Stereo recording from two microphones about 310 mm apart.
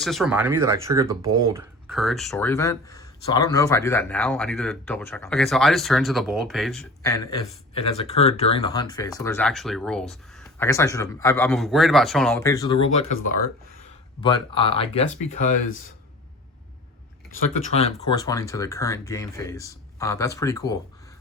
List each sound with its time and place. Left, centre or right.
0.0 s speech: centre
14.2 s speech: centre
17.7 s speech: centre